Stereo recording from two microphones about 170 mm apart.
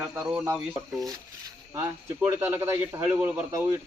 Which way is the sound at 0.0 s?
10° right (ahead or behind).